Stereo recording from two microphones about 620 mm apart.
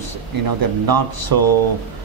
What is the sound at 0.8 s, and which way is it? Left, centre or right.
Speech, right.